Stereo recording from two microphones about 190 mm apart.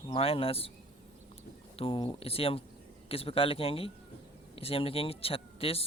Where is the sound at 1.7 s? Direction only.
30° left (ahead or behind).